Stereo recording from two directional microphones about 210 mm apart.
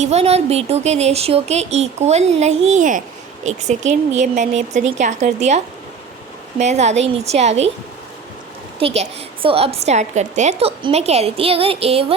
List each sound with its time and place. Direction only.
0.0 s speech: 30° right (ahead or behind)
8.8 s a woman's voice: 30° right (ahead or behind)